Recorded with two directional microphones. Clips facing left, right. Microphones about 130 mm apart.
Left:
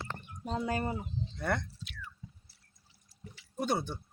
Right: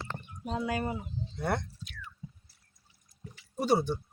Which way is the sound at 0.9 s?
10° right (ahead or behind).